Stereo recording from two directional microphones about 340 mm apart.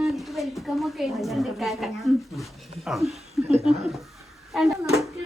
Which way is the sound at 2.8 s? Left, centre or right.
Centre.